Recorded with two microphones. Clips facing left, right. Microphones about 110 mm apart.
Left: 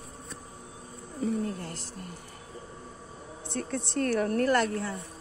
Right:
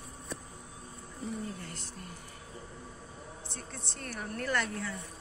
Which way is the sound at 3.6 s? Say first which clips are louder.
Left 17 dB; 75° left (ahead or behind).